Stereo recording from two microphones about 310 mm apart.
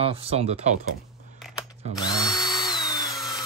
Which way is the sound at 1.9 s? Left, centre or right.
Centre.